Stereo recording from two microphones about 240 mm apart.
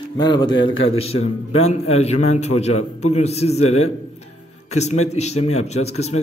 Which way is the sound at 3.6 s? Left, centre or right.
Left.